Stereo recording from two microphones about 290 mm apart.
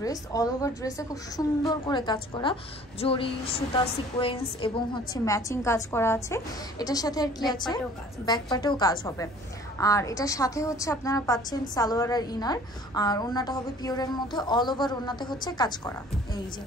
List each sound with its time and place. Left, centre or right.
0.0 s a woman's voice: centre